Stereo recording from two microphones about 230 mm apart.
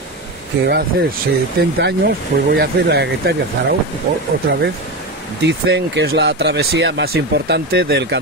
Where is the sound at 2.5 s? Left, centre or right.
Right.